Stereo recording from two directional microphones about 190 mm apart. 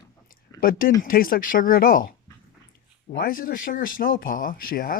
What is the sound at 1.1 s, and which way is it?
Speech, 50° left (ahead or behind).